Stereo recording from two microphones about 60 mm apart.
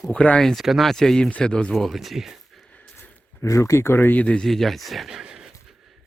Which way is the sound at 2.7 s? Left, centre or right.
Left.